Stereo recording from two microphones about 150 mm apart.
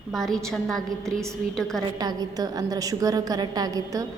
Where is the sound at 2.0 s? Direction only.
25° right (ahead or behind).